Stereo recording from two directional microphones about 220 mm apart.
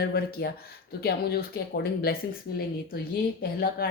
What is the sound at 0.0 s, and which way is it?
Speech, 45° left (ahead or behind).